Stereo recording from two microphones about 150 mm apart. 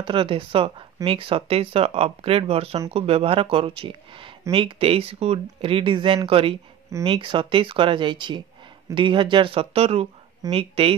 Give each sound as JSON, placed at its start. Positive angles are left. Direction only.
{"t": 0.0, "sound": "speech", "side_deg": -35}